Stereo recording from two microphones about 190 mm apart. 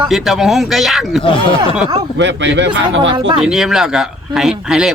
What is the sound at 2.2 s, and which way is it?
Speech, 70° right (ahead or behind).